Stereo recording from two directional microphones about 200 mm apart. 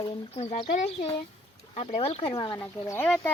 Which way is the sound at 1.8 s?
30° left (ahead or behind).